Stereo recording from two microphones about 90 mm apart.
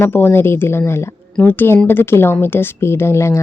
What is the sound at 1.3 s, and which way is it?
Speech, 20° left (ahead or behind).